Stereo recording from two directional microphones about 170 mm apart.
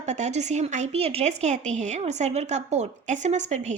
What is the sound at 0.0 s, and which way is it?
A woman's voice, 40° right (ahead or behind).